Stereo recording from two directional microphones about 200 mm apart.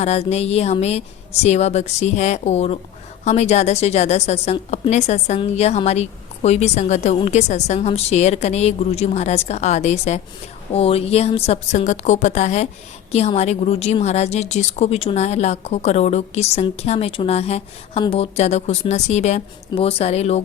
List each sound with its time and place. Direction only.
0.0 s a woman's voice: 30° left (ahead or behind)